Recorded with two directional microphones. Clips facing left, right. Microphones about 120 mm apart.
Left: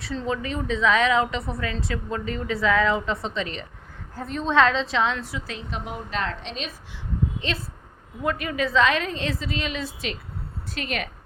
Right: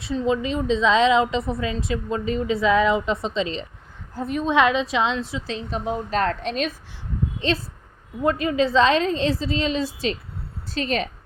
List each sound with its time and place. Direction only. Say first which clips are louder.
0.0 s a woman's voice: right 5 dB; 15° right (ahead or behind)
4.3 s a woman's voice: right 1 dB; 10° right (ahead or behind); by 6.0 s 25° right (ahead or behind)
6.1 s a woman's voice: right 6 dB; 45° right (ahead or behind)
7.4 s a woman's voice: right 6 dB; 35° right (ahead or behind)